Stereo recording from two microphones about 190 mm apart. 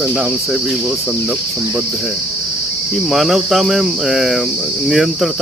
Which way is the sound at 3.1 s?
Centre (ahead or behind).